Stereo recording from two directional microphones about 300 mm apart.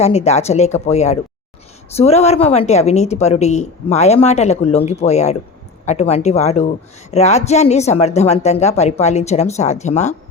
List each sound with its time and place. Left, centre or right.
0.0 s a woman's voice: left